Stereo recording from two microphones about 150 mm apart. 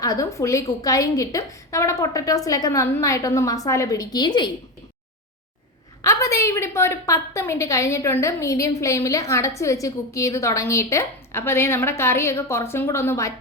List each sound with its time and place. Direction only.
0.0 s a woman's voice: 20° left (ahead or behind)
6.0 s a woman's voice: 20° left (ahead or behind)